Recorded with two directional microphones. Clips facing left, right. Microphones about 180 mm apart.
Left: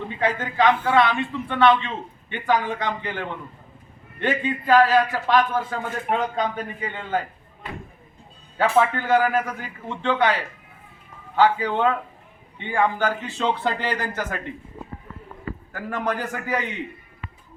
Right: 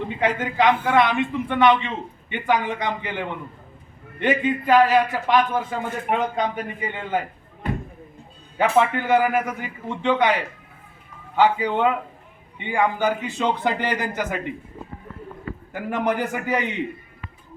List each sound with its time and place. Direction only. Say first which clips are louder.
0.2 s a man's voice: even; 20° right (ahead or behind)
8.5 s a man's voice: right 1 dB; 5° right (ahead or behind)
15.7 s a man's voice: right 4 dB; 20° right (ahead or behind)